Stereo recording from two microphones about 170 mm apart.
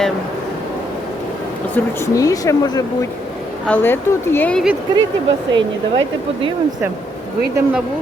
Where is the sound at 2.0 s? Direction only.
20° left (ahead or behind).